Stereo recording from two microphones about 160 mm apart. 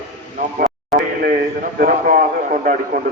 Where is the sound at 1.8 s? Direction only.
60° right (ahead or behind).